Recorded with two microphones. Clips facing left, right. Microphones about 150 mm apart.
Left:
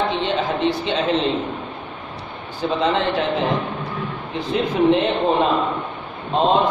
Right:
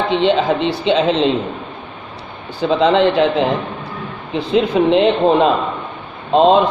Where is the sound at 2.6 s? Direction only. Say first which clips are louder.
Right 7 dB; 85° right.